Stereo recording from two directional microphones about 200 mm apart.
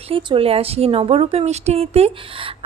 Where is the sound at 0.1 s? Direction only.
25° right (ahead or behind).